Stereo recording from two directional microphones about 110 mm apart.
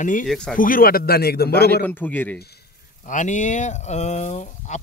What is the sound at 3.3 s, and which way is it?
Speech, 90° left.